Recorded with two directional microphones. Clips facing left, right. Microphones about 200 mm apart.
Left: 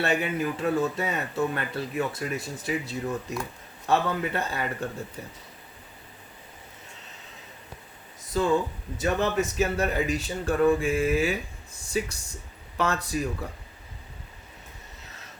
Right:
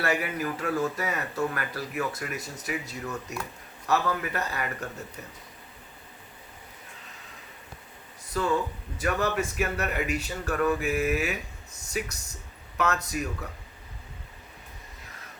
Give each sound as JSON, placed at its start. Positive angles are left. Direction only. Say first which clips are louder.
{"t": 0.0, "sound": "speech", "louder": "left 2 dB", "side_deg": 25}
{"t": 8.3, "sound": "speech", "louder": "left 3 dB", "side_deg": 25}